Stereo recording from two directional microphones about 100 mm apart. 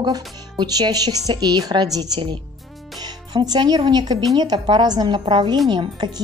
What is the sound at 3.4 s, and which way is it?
A woman's voice, 45° right (ahead or behind).